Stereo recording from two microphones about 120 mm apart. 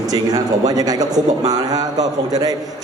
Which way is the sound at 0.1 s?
30° right (ahead or behind).